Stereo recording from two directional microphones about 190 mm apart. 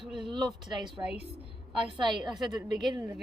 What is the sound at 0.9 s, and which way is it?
Speech, 5° right (ahead or behind).